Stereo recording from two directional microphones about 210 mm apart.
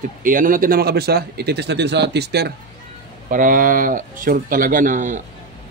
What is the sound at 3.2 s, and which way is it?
A man's voice, 40° right (ahead or behind).